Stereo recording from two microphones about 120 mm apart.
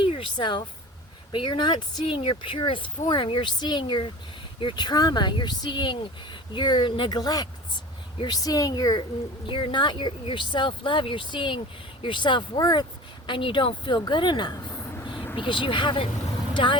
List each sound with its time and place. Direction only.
0.0 s speech: 45° left (ahead or behind)